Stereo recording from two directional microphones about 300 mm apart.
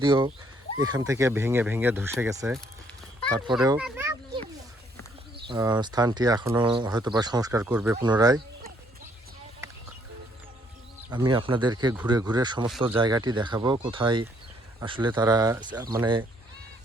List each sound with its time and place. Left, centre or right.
0.0 s speech: centre
3.6 s speech: centre
3.8 s children playing: centre
5.5 s speech: centre
11.1 s speech: centre